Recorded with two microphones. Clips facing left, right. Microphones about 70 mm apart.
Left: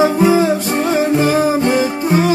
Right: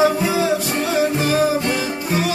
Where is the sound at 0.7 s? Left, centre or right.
Left.